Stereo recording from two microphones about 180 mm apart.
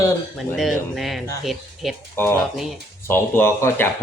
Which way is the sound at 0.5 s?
Centre (ahead or behind).